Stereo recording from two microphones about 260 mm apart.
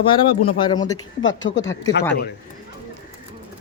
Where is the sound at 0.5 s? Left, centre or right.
Centre.